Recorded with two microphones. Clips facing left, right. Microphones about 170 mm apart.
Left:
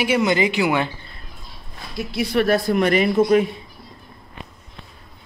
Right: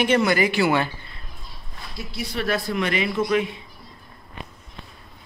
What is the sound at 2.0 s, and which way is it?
Speech, 65° left (ahead or behind).